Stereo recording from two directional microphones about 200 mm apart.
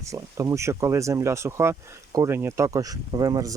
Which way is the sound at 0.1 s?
15° right (ahead or behind).